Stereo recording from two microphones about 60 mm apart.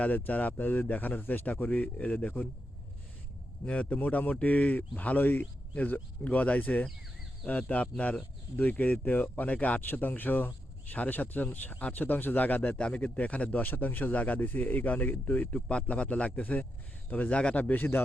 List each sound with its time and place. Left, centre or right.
0.0 s speech: left
3.7 s speech: left